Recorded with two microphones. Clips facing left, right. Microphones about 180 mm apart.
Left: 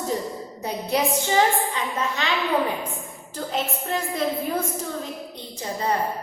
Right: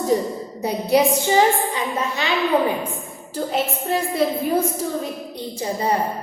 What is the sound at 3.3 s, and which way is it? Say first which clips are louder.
A woman's voice: right 5 dB; 10° right (ahead or behind).